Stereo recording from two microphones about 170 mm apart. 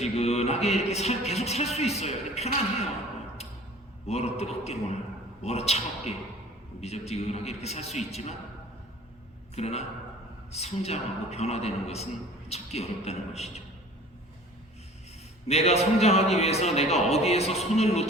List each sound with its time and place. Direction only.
0.0 s a man's voice: 40° left (ahead or behind)
4.0 s a man's voice: 40° left (ahead or behind)
9.6 s a man's voice: 40° left (ahead or behind)
15.4 s a man's voice: 40° left (ahead or behind)